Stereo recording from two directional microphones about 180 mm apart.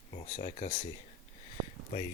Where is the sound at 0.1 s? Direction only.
30° left (ahead or behind).